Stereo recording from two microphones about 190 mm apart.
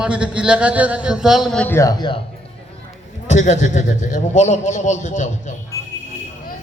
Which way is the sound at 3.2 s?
40° left (ahead or behind).